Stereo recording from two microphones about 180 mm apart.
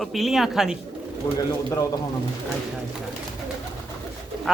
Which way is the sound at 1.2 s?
20° left (ahead or behind).